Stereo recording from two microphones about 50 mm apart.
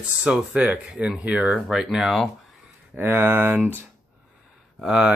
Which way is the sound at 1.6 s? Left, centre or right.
Centre.